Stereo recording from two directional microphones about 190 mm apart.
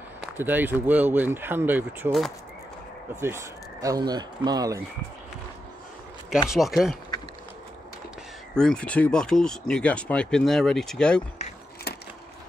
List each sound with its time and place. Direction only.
0.4 s speech: 10° right (ahead or behind)
6.5 s speech: centre (ahead or behind)
8.5 s speech: 5° left (ahead or behind)